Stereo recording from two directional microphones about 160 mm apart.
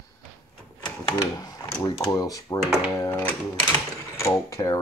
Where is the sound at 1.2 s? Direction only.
20° left (ahead or behind).